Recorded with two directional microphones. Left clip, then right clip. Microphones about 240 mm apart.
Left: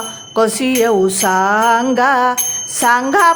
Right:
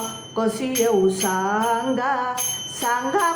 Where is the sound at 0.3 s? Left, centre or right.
Left.